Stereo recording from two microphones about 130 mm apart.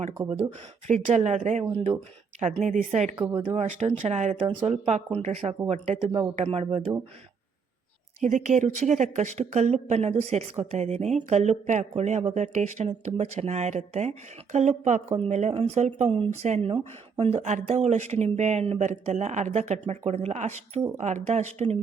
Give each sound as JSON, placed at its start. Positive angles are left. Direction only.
{"t": 0.2, "sound": "speech", "side_deg": 5}
{"t": 0.9, "sound": "speech", "side_deg": -65}
{"t": 2.6, "sound": "speech", "side_deg": -65}
{"t": 4.4, "sound": "speech", "side_deg": -50}
{"t": 8.2, "sound": "speech", "side_deg": -70}